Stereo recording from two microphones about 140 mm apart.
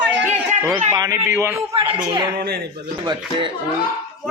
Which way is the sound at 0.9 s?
25° right (ahead or behind).